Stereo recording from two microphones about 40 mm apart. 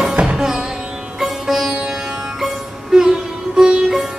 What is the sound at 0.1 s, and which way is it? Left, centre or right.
Music, right.